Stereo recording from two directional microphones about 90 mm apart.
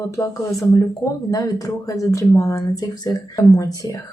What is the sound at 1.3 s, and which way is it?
Speech, 40° left (ahead or behind).